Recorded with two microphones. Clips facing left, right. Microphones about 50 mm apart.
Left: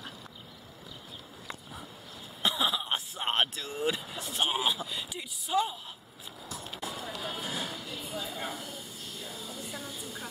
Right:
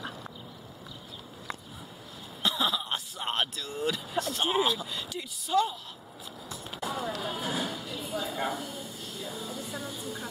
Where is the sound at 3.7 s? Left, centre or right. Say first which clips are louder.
Right 2 dB; centre.